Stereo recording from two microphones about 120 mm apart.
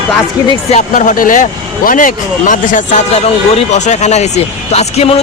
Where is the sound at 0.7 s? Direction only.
90° left.